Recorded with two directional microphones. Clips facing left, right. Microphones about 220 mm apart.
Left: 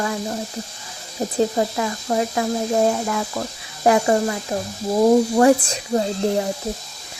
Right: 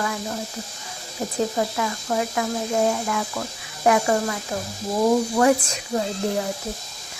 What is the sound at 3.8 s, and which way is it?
Speech, 30° left (ahead or behind).